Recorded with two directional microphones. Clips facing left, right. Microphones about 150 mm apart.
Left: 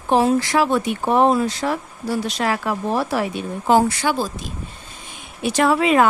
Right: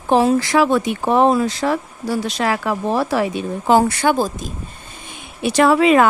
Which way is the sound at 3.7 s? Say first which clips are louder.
Right 2 dB; 60° right (ahead or behind).